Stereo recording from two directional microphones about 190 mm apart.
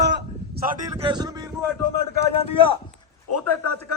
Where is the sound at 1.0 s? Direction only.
25° right (ahead or behind).